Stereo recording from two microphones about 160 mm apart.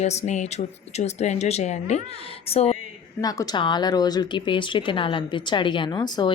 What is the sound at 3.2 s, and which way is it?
Speech, 25° left (ahead or behind).